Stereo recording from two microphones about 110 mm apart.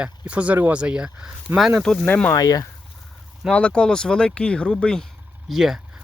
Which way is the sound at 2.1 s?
15° left (ahead or behind).